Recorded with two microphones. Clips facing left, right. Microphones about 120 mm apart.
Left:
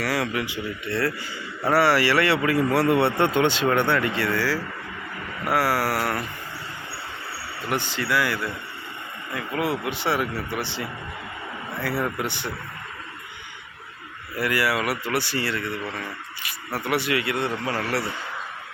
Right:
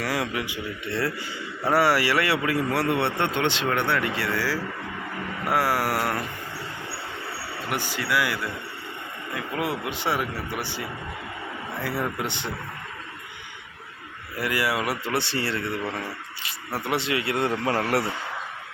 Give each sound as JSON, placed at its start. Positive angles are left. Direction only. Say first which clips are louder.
{"t": 0.0, "sound": "speech", "louder": "left 2 dB", "side_deg": -15}
{"t": 7.7, "sound": "speech", "louder": "left 2 dB", "side_deg": -10}
{"t": 14.4, "sound": "speech", "louder": "left 2 dB", "side_deg": -20}
{"t": 17.3, "sound": "speech", "louder": "right 2 dB", "side_deg": -45}